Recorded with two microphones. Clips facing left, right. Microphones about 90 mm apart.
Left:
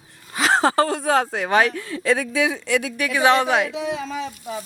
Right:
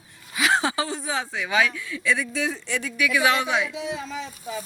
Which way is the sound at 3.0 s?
35° left (ahead or behind).